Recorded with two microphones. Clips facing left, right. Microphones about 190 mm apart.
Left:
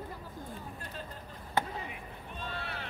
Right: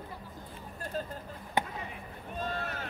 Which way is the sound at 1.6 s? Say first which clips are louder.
Even; 15° right (ahead or behind).